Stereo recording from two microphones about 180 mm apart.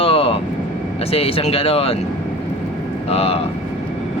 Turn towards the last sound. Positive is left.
turn(degrees=35)  # may be behind; listen again after turning